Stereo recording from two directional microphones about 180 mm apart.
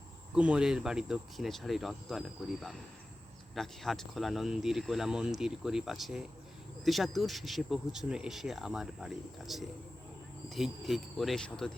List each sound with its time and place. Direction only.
0.3 s speech: 5° right (ahead or behind)